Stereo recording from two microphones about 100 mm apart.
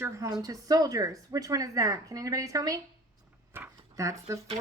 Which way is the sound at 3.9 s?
30° right (ahead or behind).